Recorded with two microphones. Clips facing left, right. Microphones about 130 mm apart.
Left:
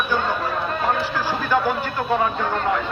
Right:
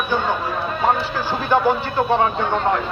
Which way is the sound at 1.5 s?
30° right (ahead or behind).